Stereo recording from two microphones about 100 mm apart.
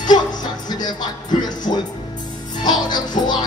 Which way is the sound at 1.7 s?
65° left (ahead or behind).